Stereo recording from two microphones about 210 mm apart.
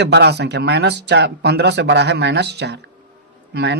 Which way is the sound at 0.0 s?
55° right (ahead or behind).